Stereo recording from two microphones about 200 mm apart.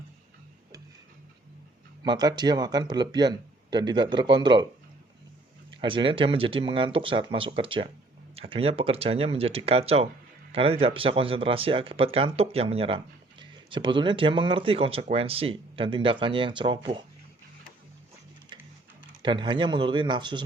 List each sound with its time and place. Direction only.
2.0 s speech: 20° right (ahead or behind)
5.7 s speech: 25° right (ahead or behind)
19.2 s speech: 25° right (ahead or behind)